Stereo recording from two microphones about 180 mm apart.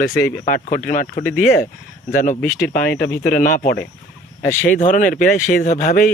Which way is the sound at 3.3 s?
50° left (ahead or behind).